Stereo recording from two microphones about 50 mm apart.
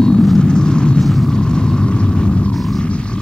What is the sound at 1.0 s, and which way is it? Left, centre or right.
Vehicle, centre.